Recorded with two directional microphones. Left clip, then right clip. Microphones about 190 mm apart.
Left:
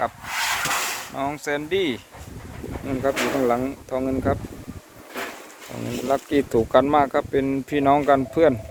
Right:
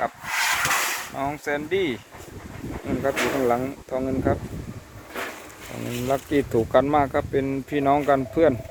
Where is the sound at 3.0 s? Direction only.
Centre (ahead or behind).